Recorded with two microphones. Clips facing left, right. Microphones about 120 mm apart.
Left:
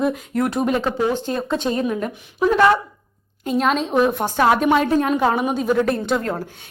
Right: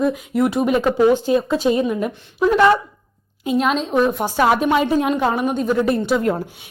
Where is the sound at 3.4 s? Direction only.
Centre (ahead or behind).